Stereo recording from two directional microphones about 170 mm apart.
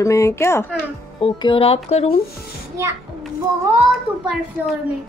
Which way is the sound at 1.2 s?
30° left (ahead or behind).